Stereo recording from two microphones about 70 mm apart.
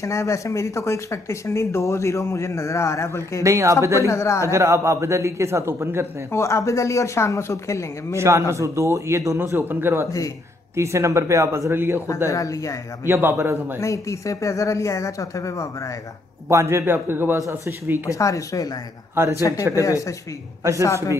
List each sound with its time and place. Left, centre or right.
0.0 s speech: left
3.4 s a man's voice: right
4.0 s speech: left
4.5 s a man's voice: right
6.3 s speech: left
8.2 s a man's voice: right
9.4 s a man's voice: right
10.8 s a man's voice: right
11.7 s a man's voice: right
12.3 s speech: left
13.0 s a man's voice: right
13.7 s speech: left
16.4 s a man's voice: right
18.1 s speech: left